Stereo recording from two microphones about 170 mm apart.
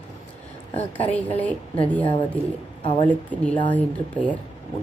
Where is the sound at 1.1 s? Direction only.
10° left (ahead or behind).